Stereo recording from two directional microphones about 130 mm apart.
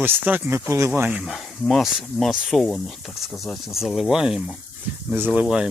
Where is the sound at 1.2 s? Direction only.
Centre (ahead or behind).